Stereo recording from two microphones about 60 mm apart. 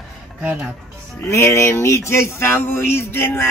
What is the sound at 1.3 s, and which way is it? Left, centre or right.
Speech, left.